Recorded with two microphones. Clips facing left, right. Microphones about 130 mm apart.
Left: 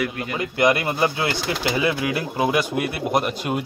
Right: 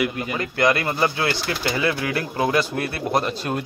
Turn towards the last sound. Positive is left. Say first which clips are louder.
# left 1 dB
turn(degrees=15)  # may be behind; listen again after turning